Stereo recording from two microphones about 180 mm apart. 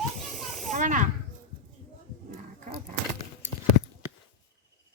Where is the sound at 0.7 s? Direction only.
45° right (ahead or behind).